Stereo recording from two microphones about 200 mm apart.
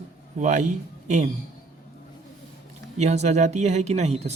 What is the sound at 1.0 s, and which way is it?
Speech, 35° right (ahead or behind).